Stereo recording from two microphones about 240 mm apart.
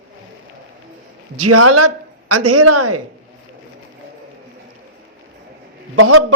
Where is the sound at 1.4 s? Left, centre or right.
Right.